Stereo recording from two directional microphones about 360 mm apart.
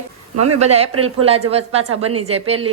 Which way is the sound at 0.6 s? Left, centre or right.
Centre.